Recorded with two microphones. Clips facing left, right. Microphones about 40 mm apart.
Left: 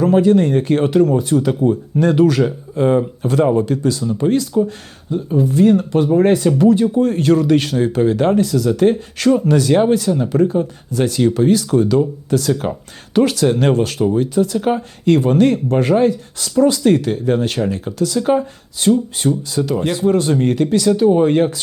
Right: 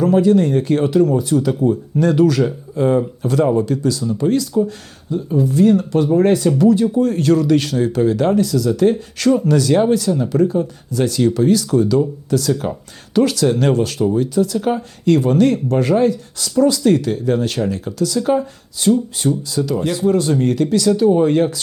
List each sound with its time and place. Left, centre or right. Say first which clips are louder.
0.0 s speech: left 1 dB; left